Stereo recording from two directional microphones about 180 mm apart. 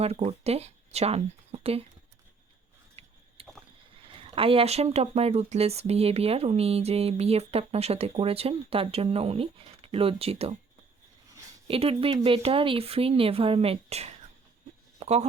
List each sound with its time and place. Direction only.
0.0 s speech: 35° right (ahead or behind)
3.0 s a sound: 35° right (ahead or behind)
3.4 s rowboat: 30° right (ahead or behind)
4.0 s speech: 30° right (ahead or behind)
11.7 s speech: 30° right (ahead or behind)
14.9 s a sound: 35° right (ahead or behind)